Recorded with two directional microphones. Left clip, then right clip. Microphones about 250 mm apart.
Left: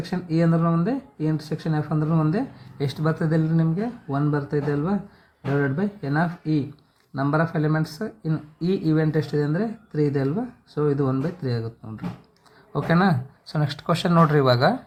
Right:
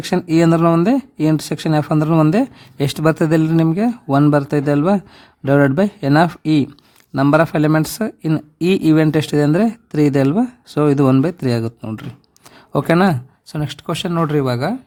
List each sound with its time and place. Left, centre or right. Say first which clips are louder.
0.1 s speech: right 10 dB; right